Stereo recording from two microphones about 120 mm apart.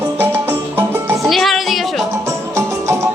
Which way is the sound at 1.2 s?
Centre (ahead or behind).